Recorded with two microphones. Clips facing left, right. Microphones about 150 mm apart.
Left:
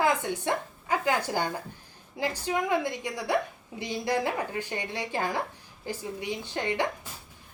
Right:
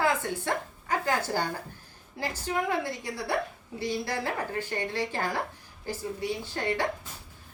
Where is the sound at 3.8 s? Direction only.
15° left (ahead or behind).